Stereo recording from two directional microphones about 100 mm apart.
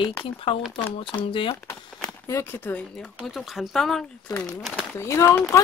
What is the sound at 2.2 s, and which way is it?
Speech, 25° left (ahead or behind).